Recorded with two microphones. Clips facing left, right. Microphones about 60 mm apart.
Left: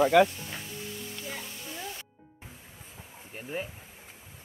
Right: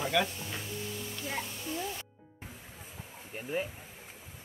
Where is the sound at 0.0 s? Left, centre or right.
Left.